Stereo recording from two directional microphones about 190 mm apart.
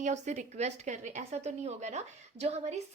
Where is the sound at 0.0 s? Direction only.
40° right (ahead or behind).